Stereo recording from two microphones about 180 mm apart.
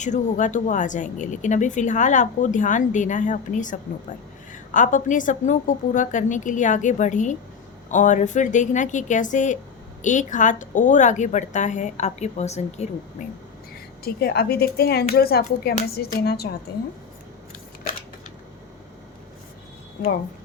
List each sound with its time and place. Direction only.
0.0 s speech: 40° left (ahead or behind)
14.0 s speech: 60° left (ahead or behind)